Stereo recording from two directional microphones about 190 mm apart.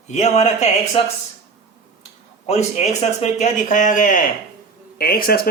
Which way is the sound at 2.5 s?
35° left (ahead or behind).